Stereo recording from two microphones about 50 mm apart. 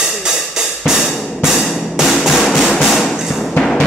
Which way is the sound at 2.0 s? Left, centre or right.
Centre.